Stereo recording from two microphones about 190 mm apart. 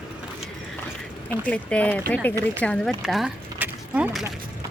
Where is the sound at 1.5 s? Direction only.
5° left (ahead or behind).